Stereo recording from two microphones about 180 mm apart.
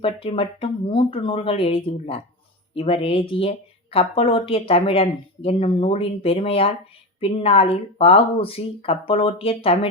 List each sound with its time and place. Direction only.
0.0 s speech: 30° left (ahead or behind)